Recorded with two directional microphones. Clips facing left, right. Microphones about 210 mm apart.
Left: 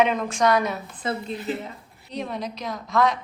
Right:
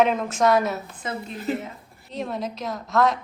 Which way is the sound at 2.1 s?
Centre (ahead or behind).